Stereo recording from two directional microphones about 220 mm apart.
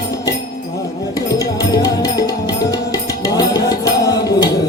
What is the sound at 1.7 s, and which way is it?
Music, 15° left (ahead or behind).